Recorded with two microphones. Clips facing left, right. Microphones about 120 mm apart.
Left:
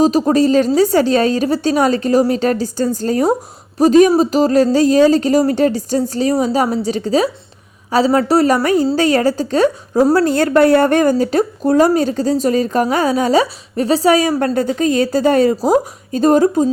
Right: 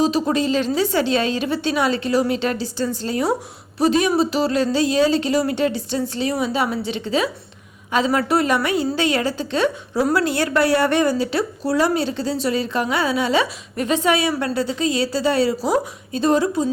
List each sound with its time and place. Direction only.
0.0 s a woman's voice: 40° left (ahead or behind)